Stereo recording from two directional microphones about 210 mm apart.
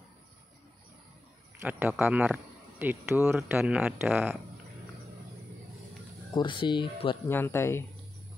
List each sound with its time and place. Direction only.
1.6 s speech: 10° right (ahead or behind)
6.3 s speech: 25° left (ahead or behind)
7.2 s speech: 10° left (ahead or behind)